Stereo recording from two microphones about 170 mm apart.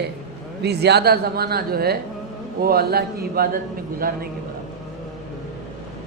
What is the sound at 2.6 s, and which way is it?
A man's voice, 65° right (ahead or behind).